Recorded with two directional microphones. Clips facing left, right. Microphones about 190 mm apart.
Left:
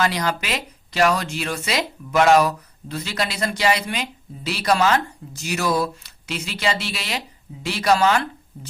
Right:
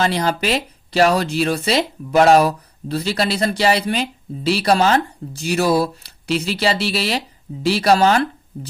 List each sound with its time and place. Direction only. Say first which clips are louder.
0.0 s speech: right 4 dB; 30° right (ahead or behind)